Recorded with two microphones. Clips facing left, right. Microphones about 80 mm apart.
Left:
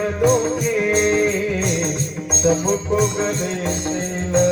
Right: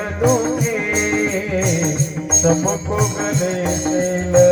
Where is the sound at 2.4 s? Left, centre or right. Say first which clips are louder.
Right 2 dB; centre.